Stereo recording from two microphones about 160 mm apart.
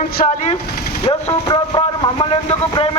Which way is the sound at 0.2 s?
50° left (ahead or behind).